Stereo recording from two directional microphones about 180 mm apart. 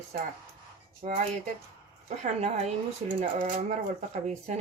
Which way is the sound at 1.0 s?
40° right (ahead or behind).